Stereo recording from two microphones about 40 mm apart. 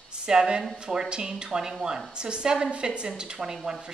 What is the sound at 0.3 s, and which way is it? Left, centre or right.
A woman's voice, centre.